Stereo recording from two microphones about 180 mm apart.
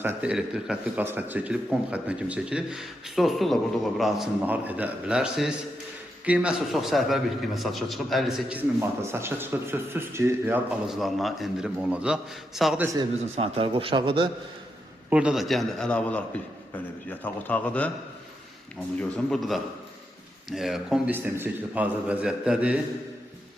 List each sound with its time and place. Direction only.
0.0 s a man's voice: 10° right (ahead or behind)
13.3 s a man's voice: 30° right (ahead or behind)
15.1 s a man's voice: 5° right (ahead or behind)
18.9 s a man's voice: 5° left (ahead or behind)